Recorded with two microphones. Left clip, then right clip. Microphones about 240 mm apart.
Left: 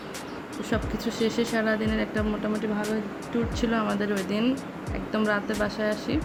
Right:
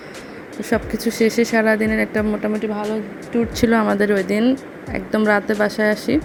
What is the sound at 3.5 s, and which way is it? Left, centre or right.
Speech, right.